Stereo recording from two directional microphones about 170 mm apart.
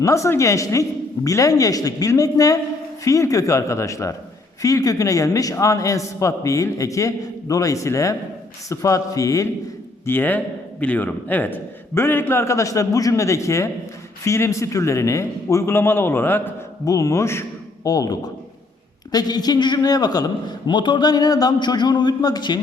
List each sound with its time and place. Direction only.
0.0 s a man's voice: 20° left (ahead or behind)